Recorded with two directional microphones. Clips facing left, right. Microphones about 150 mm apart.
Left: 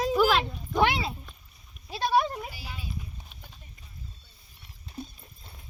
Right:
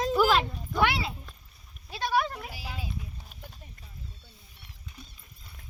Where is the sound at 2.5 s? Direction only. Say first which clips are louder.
Right 3 dB; 90° right.